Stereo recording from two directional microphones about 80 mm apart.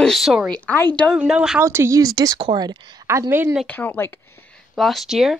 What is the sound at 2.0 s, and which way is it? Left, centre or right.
Speech, right.